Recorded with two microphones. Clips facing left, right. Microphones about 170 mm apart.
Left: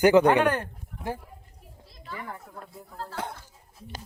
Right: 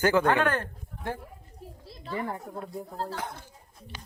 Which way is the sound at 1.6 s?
30° right (ahead or behind).